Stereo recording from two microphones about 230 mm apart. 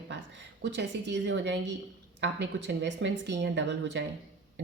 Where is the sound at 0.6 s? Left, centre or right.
Right.